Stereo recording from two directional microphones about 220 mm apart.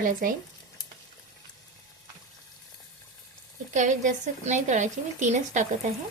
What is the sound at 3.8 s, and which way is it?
A woman's voice, 35° right (ahead or behind).